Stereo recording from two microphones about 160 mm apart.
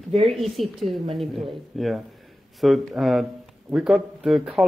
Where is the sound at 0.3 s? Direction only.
Centre (ahead or behind).